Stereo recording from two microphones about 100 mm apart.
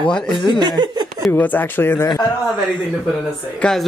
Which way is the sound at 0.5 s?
45° right (ahead or behind).